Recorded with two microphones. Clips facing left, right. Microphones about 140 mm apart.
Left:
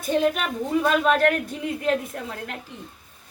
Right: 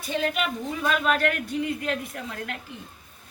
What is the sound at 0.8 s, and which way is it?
A woman's voice, 35° left (ahead or behind).